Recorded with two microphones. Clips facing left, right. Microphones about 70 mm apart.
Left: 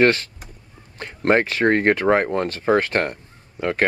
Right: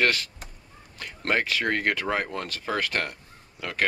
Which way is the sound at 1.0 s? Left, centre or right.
Left.